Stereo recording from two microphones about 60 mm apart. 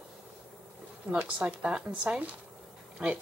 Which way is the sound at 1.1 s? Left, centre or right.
Centre.